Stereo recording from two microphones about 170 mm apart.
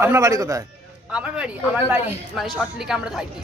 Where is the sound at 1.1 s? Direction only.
5° right (ahead or behind).